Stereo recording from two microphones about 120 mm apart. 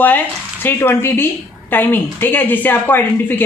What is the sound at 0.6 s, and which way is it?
A man's voice, 20° left (ahead or behind).